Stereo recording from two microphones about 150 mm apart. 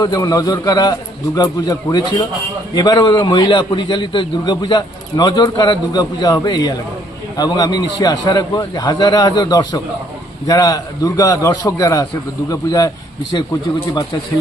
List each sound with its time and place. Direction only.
0.0 s a man's voice: 25° left (ahead or behind)